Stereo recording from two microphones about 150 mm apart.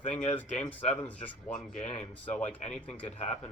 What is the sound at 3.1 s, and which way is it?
Speech, 55° left (ahead or behind).